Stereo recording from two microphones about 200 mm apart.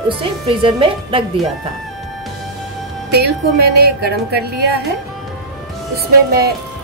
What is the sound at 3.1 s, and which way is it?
Speech, 50° right (ahead or behind).